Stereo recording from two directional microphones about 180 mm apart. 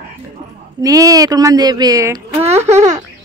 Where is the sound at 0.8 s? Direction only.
20° right (ahead or behind).